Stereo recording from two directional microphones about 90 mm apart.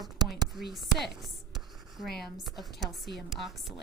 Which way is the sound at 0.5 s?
Centre (ahead or behind).